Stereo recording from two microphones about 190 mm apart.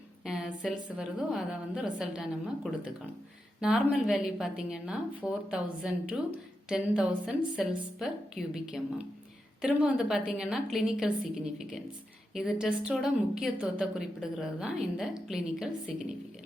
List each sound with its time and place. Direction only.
0.3 s a woman's voice: centre (ahead or behind)
3.6 s a woman's voice: 5° right (ahead or behind)